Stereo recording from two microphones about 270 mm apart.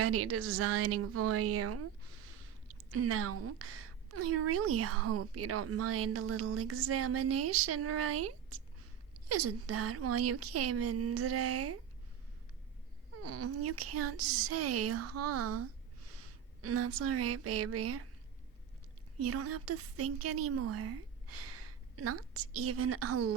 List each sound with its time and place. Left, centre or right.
0.0 s a woman's voice: right
13.2 s a woman's voice: right
16.0 s a sound: right
19.2 s a woman's voice: right